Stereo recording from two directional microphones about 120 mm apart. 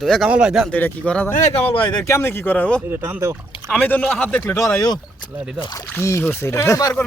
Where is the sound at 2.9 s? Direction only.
20° right (ahead or behind).